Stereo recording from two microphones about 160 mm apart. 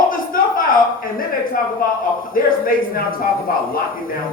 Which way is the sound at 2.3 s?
65° left (ahead or behind).